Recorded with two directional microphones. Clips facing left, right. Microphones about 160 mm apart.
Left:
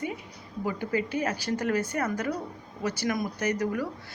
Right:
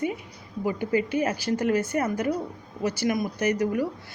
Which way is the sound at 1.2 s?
25° right (ahead or behind).